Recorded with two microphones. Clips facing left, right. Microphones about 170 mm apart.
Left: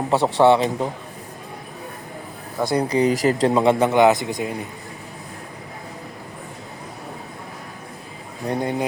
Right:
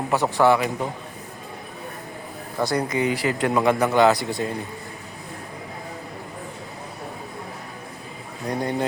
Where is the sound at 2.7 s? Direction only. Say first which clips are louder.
Left 6 dB; 35° left (ahead or behind).